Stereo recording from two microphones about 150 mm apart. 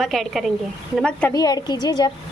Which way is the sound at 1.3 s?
25° left (ahead or behind).